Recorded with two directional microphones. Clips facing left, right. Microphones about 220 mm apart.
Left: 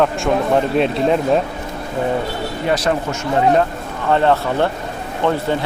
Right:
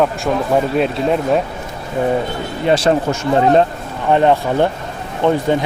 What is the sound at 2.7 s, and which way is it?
Speech, 30° right (ahead or behind).